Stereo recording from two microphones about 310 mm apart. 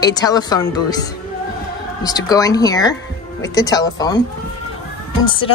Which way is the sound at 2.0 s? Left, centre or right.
Centre.